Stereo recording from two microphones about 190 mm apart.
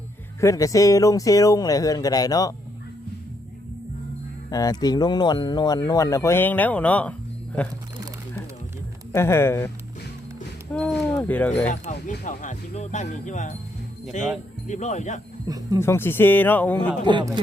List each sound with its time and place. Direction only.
0.3 s speech: 15° left (ahead or behind)
4.5 s speech: 20° left (ahead or behind)
9.1 s speech: 15° left (ahead or behind)
10.7 s a sound: 5° left (ahead or behind)
11.2 s speech: 5° left (ahead or behind)
12.2 s speech: 40° left (ahead or behind)
15.4 s speech: 20° right (ahead or behind)
15.8 s speech: 10° left (ahead or behind)
17.0 s speech: 25° right (ahead or behind)